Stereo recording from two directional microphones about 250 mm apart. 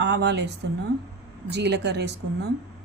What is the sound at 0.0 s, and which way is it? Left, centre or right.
Speech, right.